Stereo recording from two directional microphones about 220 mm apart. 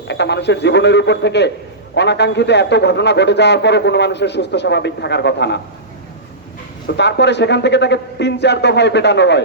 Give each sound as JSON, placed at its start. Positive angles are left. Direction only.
{"t": 0.1, "sound": "a man's voice", "side_deg": 50}
{"t": 6.8, "sound": "a man's voice", "side_deg": 50}